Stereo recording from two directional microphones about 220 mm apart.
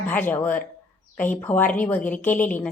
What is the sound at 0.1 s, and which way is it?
A woman's voice, 5° left (ahead or behind).